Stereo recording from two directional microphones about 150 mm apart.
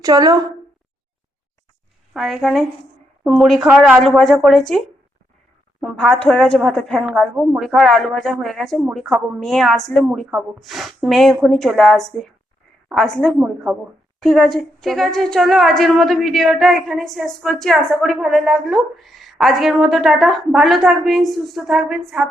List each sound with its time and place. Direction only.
0.0 s a woman's voice: 25° right (ahead or behind)
2.1 s a woman's voice: centre (ahead or behind)
6.0 s a woman's voice: 5° left (ahead or behind)